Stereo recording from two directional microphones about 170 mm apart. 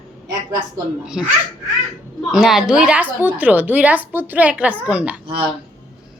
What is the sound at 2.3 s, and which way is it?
A woman's voice, 5° right (ahead or behind).